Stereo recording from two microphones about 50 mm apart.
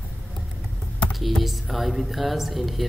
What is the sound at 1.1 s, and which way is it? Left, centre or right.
Speech, centre.